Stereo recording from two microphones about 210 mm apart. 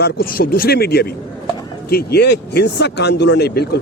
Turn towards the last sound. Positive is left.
turn(degrees=50)  # may be behind; listen again after turning